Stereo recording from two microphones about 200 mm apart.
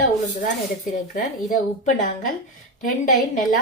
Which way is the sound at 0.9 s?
40° left (ahead or behind).